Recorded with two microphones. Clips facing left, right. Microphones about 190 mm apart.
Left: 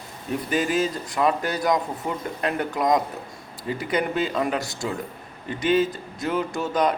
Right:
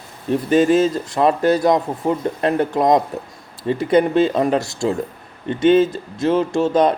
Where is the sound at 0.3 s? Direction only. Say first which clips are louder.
Right 10 dB; 30° right (ahead or behind).